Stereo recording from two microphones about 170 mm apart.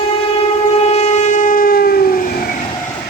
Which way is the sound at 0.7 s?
40° left (ahead or behind).